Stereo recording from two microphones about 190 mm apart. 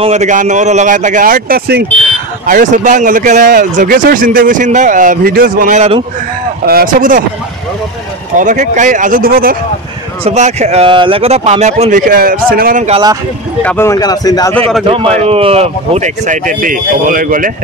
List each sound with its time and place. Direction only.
0.0 s speech: 35° right (ahead or behind); by 1.9 s 55° right (ahead or behind)
2.4 s speech: 45° right (ahead or behind)
6.6 s speech: 50° right (ahead or behind)
8.4 s speech: 40° right (ahead or behind)
10.2 s speech: 35° right (ahead or behind)
13.6 s speech: 10° left (ahead or behind)
15.1 s speech: 30° right (ahead or behind); by 17.5 s 45° right (ahead or behind)